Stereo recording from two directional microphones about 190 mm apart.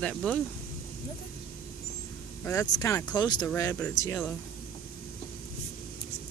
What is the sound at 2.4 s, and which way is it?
Speech, 15° left (ahead or behind).